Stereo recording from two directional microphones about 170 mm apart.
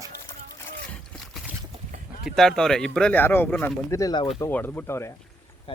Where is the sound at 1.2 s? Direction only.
Centre (ahead or behind).